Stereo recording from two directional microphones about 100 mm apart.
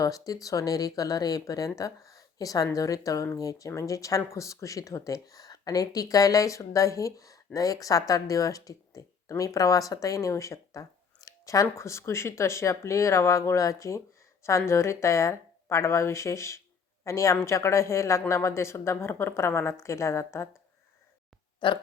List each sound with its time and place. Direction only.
0.0 s a woman's voice: 35° left (ahead or behind)
21.6 s speech: 50° left (ahead or behind)